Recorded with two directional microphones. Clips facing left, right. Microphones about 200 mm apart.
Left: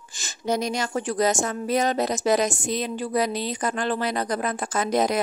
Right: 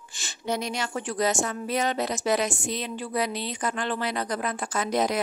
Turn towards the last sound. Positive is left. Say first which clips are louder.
# left 3 dB
turn(degrees=45)  # may be behind; listen again after turning